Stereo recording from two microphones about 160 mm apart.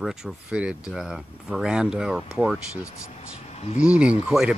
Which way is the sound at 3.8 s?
5° right (ahead or behind).